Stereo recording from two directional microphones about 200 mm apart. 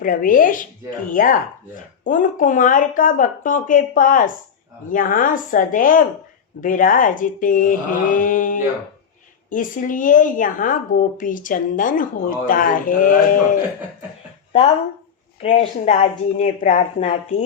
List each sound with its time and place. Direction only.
0.0 s a woman's voice: 45° left (ahead or behind)
15.4 s speech: 35° left (ahead or behind)